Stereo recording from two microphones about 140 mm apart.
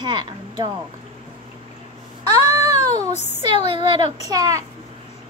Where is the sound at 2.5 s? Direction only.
20° right (ahead or behind).